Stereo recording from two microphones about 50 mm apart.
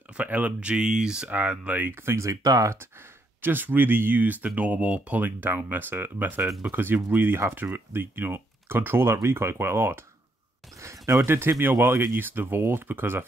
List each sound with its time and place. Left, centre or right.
0.2 s speech: right; by 1.3 s centre
1.3 s speech: right
1.9 s speech: right
3.4 s speech: right
5.2 s speech: right
10.8 s a sound: right
11.6 s speech: right